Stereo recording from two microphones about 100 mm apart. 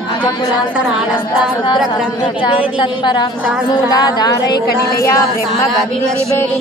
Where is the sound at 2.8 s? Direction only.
50° left (ahead or behind).